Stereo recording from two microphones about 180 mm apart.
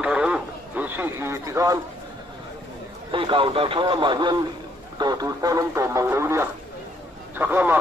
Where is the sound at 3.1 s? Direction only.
30° right (ahead or behind); by 7.8 s 10° right (ahead or behind).